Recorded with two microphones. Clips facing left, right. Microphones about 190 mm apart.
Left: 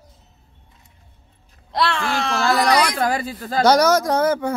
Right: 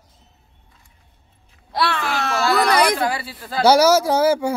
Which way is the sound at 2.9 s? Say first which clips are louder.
Left 2 dB; 45° left (ahead or behind).